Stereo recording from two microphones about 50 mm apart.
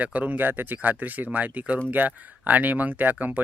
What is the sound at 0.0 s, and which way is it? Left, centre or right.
Speech, right.